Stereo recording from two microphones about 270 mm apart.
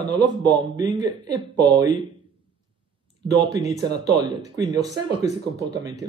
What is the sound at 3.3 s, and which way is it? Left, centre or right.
Speech, centre.